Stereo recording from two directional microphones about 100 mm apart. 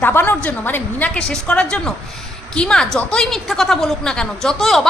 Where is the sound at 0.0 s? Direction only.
20° left (ahead or behind).